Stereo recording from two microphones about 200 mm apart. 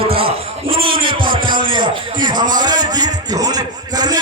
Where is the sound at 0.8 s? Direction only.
45° right (ahead or behind).